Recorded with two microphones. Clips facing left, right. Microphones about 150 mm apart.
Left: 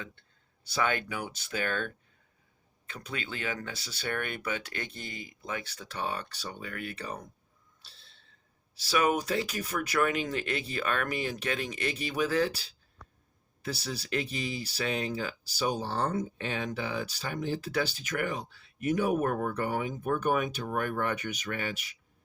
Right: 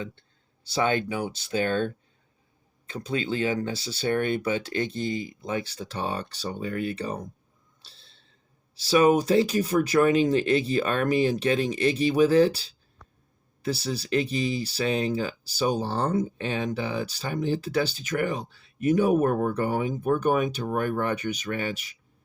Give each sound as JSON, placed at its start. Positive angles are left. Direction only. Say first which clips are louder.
{"t": 0.7, "sound": "speech", "louder": "right 6 dB", "side_deg": -30}
{"t": 7.9, "sound": "a sound", "louder": "right 2 dB", "side_deg": -30}
{"t": 8.8, "sound": "speech", "louder": "right 8 dB", "side_deg": -30}
{"t": 13.8, "sound": "speech", "louder": "right 7 dB", "side_deg": -30}